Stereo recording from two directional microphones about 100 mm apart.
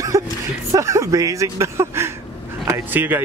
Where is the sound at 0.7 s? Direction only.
30° right (ahead or behind).